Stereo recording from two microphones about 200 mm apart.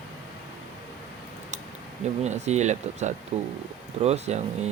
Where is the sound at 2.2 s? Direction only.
35° right (ahead or behind).